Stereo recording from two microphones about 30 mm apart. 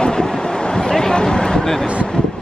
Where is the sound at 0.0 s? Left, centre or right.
Left.